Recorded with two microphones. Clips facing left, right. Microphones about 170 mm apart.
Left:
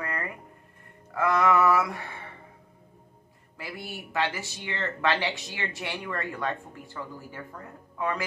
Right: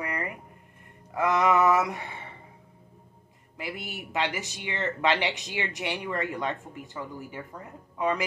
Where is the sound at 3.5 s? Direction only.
20° right (ahead or behind).